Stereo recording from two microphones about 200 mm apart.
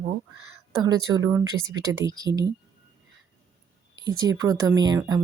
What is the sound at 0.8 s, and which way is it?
Speech, 15° right (ahead or behind).